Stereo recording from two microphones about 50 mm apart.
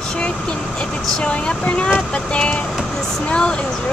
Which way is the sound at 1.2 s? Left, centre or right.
Left.